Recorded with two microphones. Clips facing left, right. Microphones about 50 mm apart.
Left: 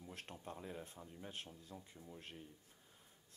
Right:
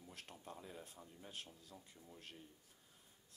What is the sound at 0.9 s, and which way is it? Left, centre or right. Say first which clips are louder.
Speech: left 3 dB; centre.